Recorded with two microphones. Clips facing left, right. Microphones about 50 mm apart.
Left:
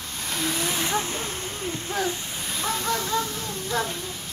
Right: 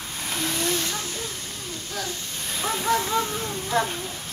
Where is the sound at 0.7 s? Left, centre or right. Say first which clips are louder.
Left 3 dB; left.